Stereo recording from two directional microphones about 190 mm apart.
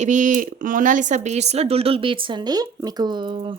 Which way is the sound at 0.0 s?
40° right (ahead or behind).